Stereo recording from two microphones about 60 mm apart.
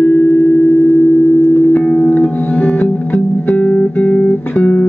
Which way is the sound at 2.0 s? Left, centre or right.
Left.